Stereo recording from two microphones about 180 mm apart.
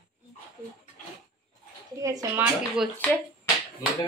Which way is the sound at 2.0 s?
20° right (ahead or behind).